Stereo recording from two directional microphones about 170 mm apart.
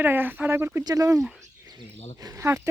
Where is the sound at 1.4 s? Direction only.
25° right (ahead or behind).